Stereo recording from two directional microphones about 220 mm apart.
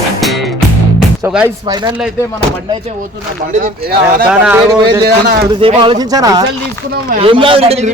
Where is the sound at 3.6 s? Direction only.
45° right (ahead or behind).